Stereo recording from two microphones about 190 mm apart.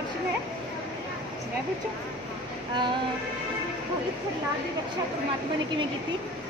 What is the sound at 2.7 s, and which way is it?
Female singing, 25° right (ahead or behind).